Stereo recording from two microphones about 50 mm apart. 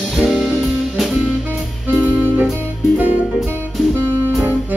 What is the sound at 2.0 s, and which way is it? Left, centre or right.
Music, right.